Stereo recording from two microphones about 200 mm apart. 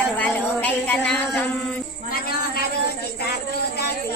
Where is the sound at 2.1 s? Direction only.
45° left (ahead or behind).